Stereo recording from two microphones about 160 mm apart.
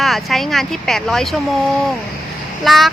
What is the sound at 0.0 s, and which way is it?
Speech, centre (ahead or behind).